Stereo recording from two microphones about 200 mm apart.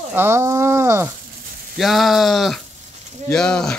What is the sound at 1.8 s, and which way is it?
Speech, centre (ahead or behind).